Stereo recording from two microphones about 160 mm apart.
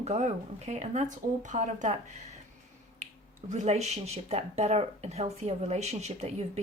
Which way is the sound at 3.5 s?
45° right (ahead or behind).